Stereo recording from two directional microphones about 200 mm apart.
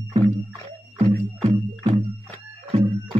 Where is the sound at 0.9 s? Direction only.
30° right (ahead or behind).